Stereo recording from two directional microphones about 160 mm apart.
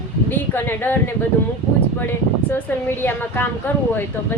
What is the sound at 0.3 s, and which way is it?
Speech, 15° left (ahead or behind).